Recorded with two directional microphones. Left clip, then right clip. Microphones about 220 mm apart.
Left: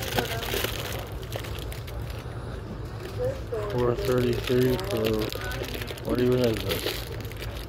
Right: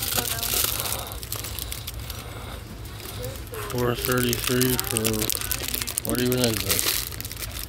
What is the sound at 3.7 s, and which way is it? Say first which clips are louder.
Speech: right 1 dB; 50° right (ahead or behind).